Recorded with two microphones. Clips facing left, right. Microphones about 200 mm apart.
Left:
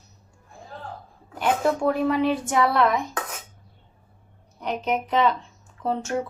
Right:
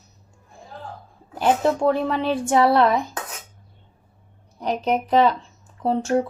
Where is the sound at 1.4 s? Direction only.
30° right (ahead or behind).